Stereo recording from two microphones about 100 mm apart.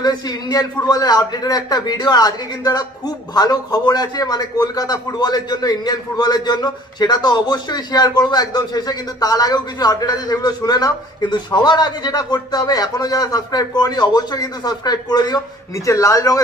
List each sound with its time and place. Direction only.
0.0 s a man's voice: 40° left (ahead or behind)